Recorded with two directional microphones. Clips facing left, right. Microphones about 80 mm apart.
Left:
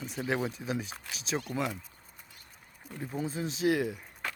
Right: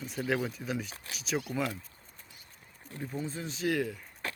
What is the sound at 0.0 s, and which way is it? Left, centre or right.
Speech, centre.